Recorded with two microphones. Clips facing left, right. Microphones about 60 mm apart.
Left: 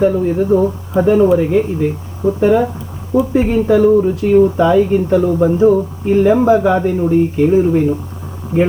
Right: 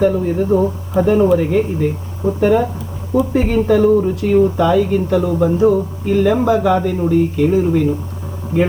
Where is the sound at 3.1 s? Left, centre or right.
Centre.